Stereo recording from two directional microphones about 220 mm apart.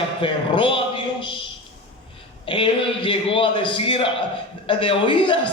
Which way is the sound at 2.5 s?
25° left (ahead or behind).